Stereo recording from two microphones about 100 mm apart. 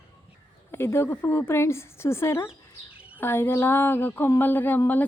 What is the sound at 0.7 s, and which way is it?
Speech, 25° left (ahead or behind).